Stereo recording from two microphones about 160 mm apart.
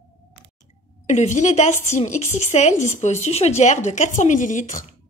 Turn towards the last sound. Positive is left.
turn(degrees=55)  # may be behind; listen again after turning